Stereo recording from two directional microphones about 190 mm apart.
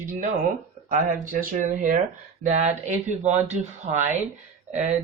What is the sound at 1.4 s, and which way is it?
Speech, 40° right (ahead or behind).